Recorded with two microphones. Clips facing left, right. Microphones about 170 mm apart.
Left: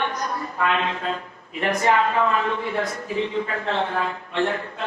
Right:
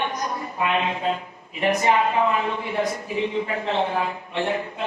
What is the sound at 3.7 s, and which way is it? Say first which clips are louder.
Speech: right 2 dB; 20° right (ahead or behind).